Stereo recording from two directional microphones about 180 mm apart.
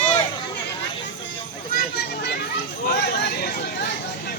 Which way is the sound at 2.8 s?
60° left (ahead or behind).